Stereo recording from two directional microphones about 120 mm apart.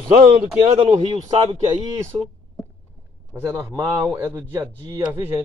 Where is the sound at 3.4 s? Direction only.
15° right (ahead or behind).